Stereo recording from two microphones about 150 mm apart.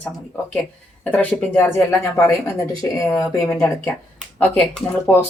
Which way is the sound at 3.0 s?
20° left (ahead or behind).